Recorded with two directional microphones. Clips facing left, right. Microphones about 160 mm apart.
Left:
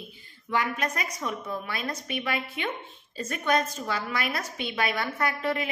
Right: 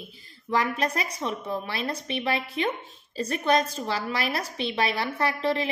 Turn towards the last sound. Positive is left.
turn(degrees=-30)  # may be behind; listen again after turning